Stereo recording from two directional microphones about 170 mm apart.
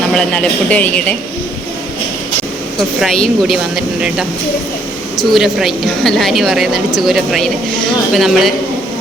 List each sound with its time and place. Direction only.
0.1 s speech: 5° left (ahead or behind)
3.0 s a woman's voice: centre (ahead or behind)
5.1 s a woman's voice: centre (ahead or behind)